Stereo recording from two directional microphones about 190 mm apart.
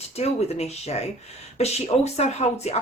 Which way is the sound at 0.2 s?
35° left (ahead or behind).